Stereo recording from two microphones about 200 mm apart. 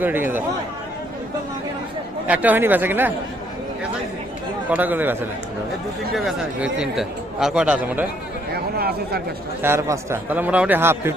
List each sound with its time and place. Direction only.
0.0 s a man's voice: 10° right (ahead or behind)
2.2 s a man's voice: 10° right (ahead or behind)
4.7 s a man's voice: 10° right (ahead or behind)
6.1 s speech: centre (ahead or behind)
8.5 s chatter: 50° right (ahead or behind)
9.6 s a man's voice: 15° right (ahead or behind)